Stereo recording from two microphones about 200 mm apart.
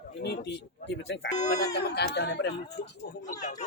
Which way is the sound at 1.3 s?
35° left (ahead or behind).